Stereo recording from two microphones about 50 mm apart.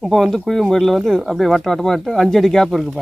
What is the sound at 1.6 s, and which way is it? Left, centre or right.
Speech, centre.